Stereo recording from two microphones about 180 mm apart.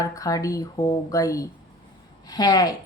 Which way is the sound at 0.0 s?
20° left (ahead or behind).